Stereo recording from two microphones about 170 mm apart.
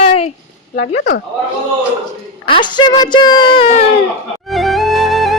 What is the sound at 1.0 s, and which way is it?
Speech, 85° left.